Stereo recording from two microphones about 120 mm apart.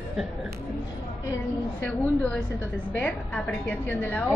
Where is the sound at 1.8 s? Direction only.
10° left (ahead or behind).